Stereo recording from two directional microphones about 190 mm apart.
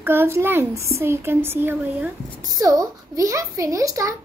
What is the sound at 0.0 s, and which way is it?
A child's voice, 10° right (ahead or behind).